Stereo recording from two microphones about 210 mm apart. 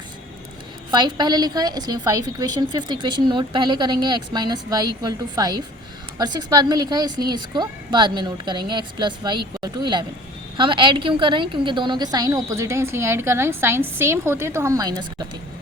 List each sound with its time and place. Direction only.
0.9 s a woman's voice: 20° right (ahead or behind)